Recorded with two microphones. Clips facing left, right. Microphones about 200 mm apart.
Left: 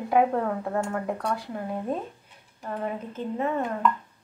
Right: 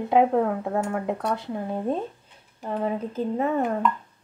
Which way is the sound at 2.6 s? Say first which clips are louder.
Right 4 dB; 35° right (ahead or behind).